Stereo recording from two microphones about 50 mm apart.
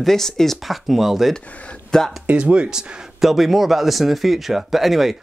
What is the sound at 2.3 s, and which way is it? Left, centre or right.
Speech, right.